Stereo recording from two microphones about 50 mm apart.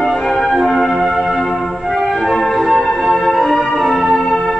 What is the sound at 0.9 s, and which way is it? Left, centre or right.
Music, centre.